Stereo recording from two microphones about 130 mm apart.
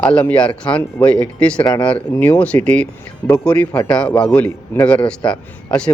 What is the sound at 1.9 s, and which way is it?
A man's voice, 10° left (ahead or behind).